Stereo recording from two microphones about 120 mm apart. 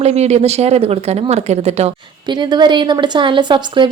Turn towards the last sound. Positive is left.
turn(degrees=-40)  # may be behind; listen again after turning